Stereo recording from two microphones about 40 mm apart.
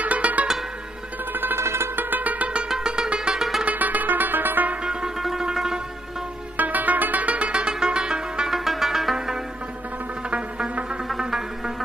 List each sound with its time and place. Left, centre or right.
0.0 s music: right
1.3 s music: right
2.8 s music: right
3.6 s music: right
5.4 s music: centre
6.5 s music: right
8.5 s zither: centre
9.1 s music: centre
10.7 s music: right
11.1 s music: centre